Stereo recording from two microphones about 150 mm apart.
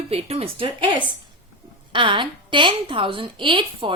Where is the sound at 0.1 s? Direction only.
45° right (ahead or behind).